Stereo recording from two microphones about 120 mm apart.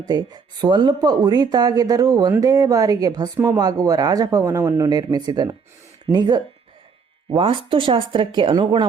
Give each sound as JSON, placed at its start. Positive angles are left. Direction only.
{"t": 0.1, "sound": "speech", "side_deg": -35}
{"t": 4.9, "sound": "speech", "side_deg": -35}
{"t": 7.3, "sound": "speech", "side_deg": -45}